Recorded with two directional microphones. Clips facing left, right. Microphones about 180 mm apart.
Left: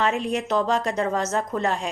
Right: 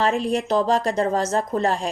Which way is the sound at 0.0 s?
35° right (ahead or behind).